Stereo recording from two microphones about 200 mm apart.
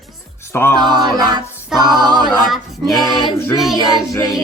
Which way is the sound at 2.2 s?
Centre (ahead or behind).